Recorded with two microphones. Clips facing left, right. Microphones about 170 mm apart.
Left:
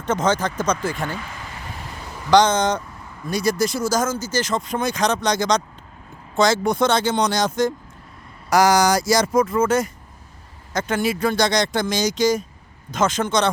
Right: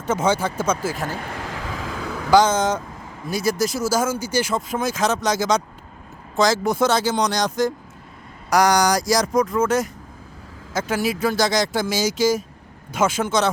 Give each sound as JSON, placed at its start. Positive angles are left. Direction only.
{"t": 0.1, "sound": "speech", "side_deg": -10}
{"t": 1.2, "sound": "vehicle", "side_deg": -70}
{"t": 2.3, "sound": "speech", "side_deg": -5}